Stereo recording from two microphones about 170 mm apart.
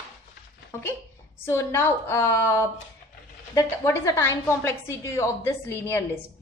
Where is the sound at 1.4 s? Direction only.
15° left (ahead or behind).